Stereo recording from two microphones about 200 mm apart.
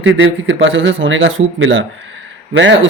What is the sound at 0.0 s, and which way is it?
A man's voice, 70° right (ahead or behind).